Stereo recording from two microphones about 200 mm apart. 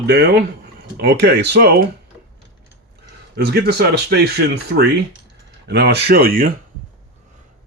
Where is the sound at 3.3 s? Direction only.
55° right (ahead or behind).